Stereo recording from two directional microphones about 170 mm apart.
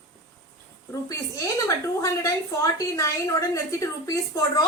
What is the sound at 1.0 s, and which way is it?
A woman's voice, 20° left (ahead or behind).